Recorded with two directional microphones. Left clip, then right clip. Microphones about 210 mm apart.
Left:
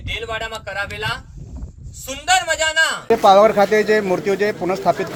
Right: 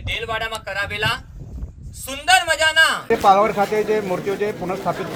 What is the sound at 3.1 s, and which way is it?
Speech, 55° left (ahead or behind).